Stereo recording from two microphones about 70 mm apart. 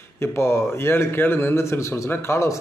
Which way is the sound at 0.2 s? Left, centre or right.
Left.